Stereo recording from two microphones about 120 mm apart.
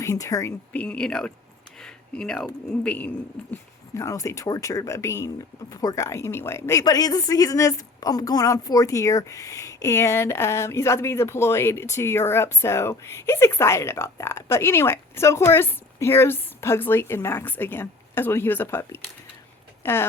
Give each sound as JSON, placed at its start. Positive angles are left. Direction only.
{"t": 0.0, "sound": "a woman's voice", "side_deg": 25}
{"t": 0.7, "sound": "speech", "side_deg": 10}
{"t": 3.9, "sound": "a woman's voice", "side_deg": 25}